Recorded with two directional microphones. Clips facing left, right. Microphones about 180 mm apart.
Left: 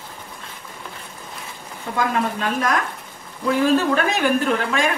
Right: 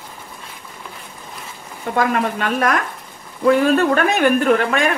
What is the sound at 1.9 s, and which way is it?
Speech, 60° right (ahead or behind).